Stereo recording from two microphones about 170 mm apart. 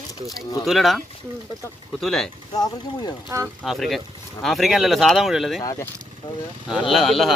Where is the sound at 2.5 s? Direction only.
25° left (ahead or behind).